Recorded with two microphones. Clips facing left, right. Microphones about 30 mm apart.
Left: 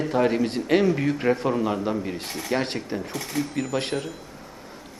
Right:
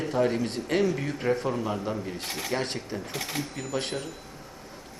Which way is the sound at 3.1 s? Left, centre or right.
Right.